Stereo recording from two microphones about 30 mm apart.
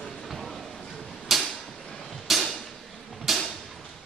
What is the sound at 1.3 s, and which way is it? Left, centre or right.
Creak, centre.